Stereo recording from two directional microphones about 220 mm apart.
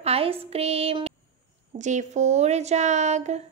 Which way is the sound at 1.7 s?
35° right (ahead or behind).